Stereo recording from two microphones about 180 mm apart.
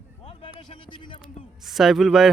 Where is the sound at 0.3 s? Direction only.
30° left (ahead or behind).